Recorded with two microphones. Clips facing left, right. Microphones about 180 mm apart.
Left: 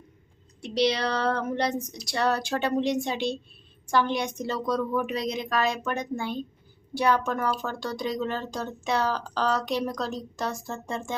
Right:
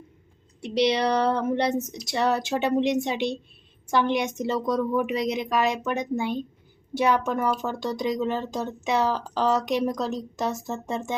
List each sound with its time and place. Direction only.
0.6 s speech: 20° right (ahead or behind)